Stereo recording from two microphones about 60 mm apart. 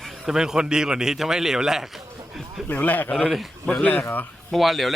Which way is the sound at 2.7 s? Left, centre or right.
Left.